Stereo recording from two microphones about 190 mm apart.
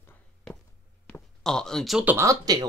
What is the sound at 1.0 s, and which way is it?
Speech, 5° left (ahead or behind).